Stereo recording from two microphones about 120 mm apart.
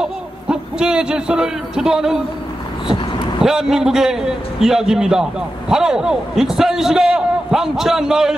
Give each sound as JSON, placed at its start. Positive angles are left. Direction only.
{"t": 0.0, "sound": "a man's voice", "side_deg": -5}
{"t": 3.4, "sound": "a man's voice", "side_deg": -5}